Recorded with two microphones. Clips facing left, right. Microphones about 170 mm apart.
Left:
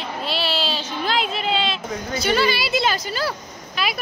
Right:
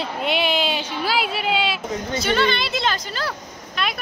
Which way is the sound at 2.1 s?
5° left (ahead or behind).